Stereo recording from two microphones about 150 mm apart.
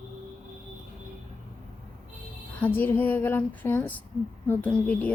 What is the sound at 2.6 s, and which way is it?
A woman's voice, 10° left (ahead or behind).